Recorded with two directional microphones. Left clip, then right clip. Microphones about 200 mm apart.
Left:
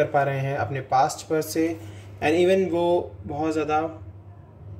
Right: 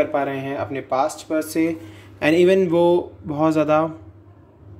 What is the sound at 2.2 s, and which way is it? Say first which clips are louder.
Speech: right 4 dB; 45° right (ahead or behind).